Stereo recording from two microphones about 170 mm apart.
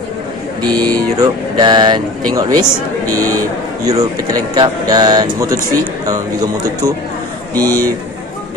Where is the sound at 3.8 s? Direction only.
20° right (ahead or behind).